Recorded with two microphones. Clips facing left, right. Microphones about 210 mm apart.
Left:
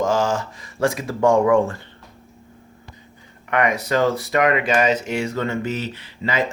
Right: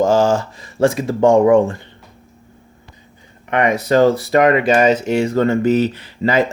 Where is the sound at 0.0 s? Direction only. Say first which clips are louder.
Right 6 dB; 30° right (ahead or behind).